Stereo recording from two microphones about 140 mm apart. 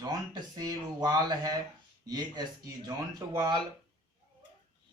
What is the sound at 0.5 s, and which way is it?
Speech, 25° right (ahead or behind).